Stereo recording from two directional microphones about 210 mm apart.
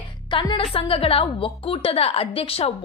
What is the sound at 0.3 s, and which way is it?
A woman's voice, 20° left (ahead or behind).